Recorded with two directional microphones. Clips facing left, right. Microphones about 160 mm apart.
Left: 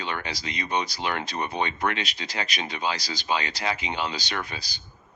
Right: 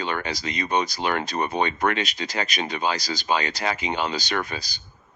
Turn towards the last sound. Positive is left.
turn(degrees=-45)  # may be behind; listen again after turning